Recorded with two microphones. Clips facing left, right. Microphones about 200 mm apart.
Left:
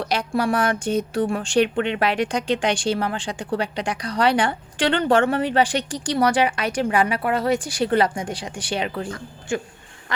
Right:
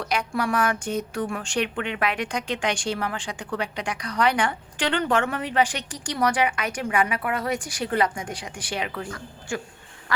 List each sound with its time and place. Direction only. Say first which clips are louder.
0.0 s speech: left 4 dB; 35° left (ahead or behind)